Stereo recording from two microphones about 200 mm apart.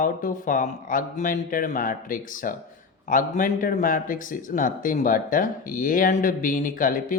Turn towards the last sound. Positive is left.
turn(degrees=40)  # may be behind; listen again after turning